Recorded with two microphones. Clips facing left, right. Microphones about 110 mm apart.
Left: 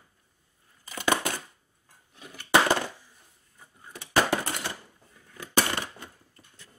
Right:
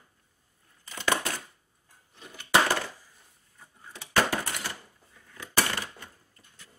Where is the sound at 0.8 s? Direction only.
15° left (ahead or behind).